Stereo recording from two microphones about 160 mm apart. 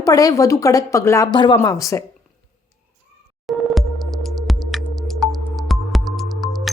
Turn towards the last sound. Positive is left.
turn(degrees=0)  # may be behind; listen again after turning